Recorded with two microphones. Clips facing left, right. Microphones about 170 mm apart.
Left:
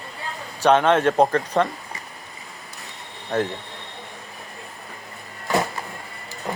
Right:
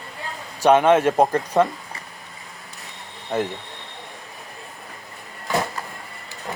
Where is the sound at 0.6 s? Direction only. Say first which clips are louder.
Right 2 dB; 10° right (ahead or behind).